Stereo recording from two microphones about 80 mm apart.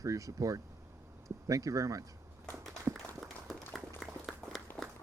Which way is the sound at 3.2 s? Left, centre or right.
Centre.